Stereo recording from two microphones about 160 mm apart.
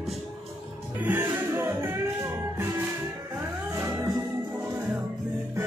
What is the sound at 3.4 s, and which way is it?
Music, 15° right (ahead or behind).